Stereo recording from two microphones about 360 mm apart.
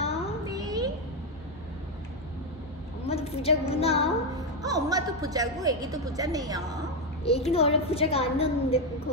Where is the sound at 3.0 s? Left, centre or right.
Centre.